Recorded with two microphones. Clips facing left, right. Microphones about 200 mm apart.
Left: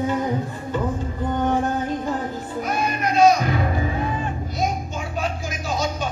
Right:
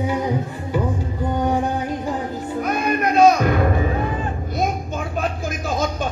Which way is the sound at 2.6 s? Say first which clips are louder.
Right 3 dB; 55° right (ahead or behind).